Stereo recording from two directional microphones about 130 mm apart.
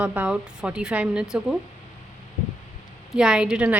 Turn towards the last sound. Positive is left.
turn(degrees=-10)  # may be behind; listen again after turning